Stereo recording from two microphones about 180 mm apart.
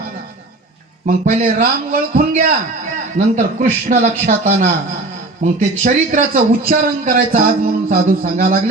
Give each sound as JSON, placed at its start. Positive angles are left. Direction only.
{"t": 1.0, "sound": "a man's voice", "side_deg": -45}